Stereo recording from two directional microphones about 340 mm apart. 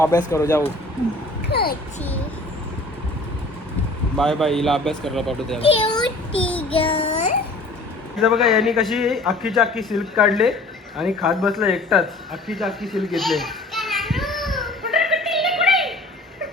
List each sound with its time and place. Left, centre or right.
0.3 s child singing: centre
1.5 s a child's voice: left
4.2 s speech: centre
5.5 s a child's voice: centre
6.4 s child singing: centre
6.7 s child singing: centre
8.2 s a man's voice: centre